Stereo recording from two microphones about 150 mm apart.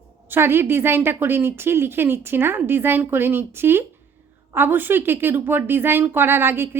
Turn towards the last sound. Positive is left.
turn(degrees=-15)  # may be behind; listen again after turning